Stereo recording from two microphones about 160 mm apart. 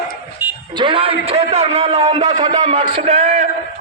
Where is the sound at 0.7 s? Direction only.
30° right (ahead or behind).